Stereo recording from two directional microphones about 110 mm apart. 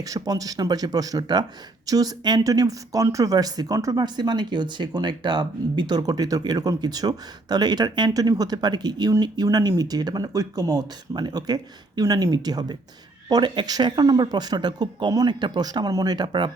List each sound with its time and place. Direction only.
0.0 s speech: 35° right (ahead or behind)